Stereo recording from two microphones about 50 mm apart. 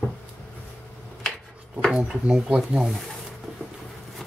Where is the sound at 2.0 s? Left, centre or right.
Centre.